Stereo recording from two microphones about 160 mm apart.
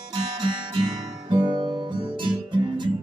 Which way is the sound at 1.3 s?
30° right (ahead or behind).